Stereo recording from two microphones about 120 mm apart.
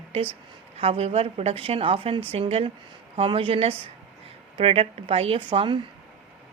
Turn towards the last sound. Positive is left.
turn(degrees=-45)  # may be behind; listen again after turning